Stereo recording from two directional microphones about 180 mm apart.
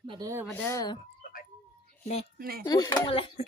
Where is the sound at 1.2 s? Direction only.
50° left (ahead or behind).